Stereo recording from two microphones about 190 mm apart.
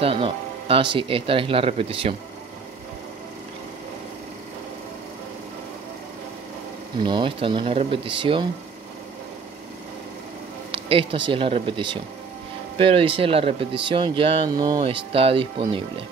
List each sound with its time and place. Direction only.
0.0 s speech: 30° right (ahead or behind)
7.0 s speech: 25° right (ahead or behind)
10.7 s a sound: 30° right (ahead or behind)
11.2 s speech: 30° right (ahead or behind)